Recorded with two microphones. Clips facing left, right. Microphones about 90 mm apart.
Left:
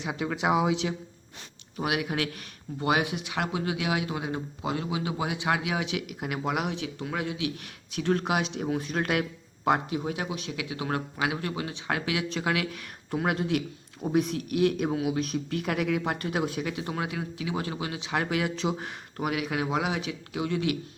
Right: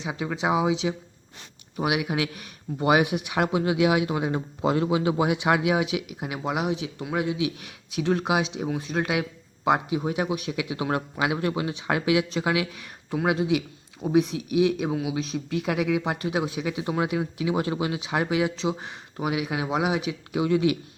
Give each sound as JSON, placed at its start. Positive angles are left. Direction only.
{"t": 0.0, "sound": "speech", "side_deg": -5}
{"t": 1.7, "sound": "speech", "side_deg": -15}
{"t": 5.8, "sound": "speech", "side_deg": -5}
{"t": 6.8, "sound": "speech", "side_deg": -20}
{"t": 7.9, "sound": "speech", "side_deg": -5}
{"t": 12.3, "sound": "speech", "side_deg": -10}
{"t": 16.7, "sound": "speech", "side_deg": -20}
{"t": 19.1, "sound": "speech", "side_deg": -10}